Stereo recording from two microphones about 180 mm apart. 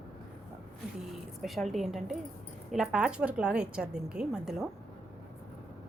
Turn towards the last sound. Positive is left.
turn(degrees=-5)  # may be behind; listen again after turning